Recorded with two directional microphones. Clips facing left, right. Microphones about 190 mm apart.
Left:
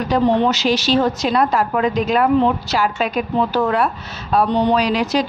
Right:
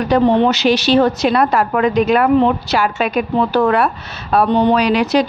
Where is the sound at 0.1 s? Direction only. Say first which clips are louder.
Right 3 dB; 65° right (ahead or behind).